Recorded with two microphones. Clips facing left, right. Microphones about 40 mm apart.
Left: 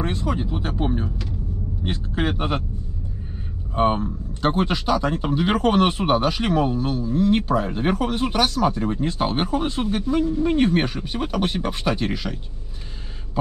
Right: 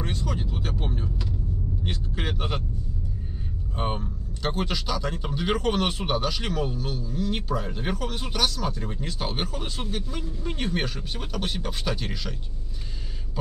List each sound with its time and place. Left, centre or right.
0.0 s speech: left
3.7 s speech: left